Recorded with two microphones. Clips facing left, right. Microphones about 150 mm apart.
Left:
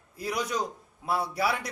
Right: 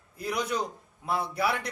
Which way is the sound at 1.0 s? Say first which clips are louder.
Left 1 dB; 5° left (ahead or behind).